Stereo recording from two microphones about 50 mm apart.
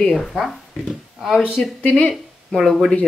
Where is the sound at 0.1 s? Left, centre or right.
Centre.